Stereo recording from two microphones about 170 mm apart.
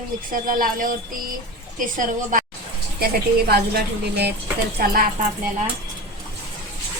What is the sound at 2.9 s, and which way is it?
A woman's voice, 65° right (ahead or behind).